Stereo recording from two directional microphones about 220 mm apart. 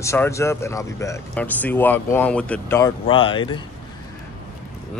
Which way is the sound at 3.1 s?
25° left (ahead or behind).